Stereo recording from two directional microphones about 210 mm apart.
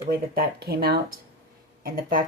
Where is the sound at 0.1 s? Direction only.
45° right (ahead or behind).